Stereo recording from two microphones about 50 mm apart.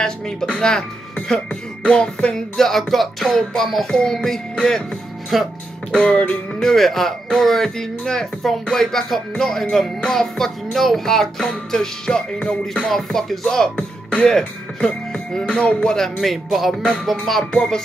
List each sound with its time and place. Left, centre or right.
0.5 s speech: centre
1.9 s music: left
5.3 s music: centre
5.9 s music: left
6.5 s music: centre
12.8 s music: centre
16.4 s music: centre
17.5 s music: centre